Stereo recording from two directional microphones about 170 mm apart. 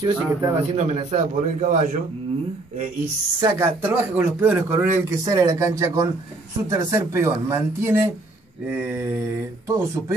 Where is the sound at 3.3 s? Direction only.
20° right (ahead or behind).